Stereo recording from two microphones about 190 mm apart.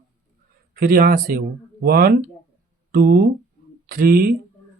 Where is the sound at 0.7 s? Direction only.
50° right (ahead or behind).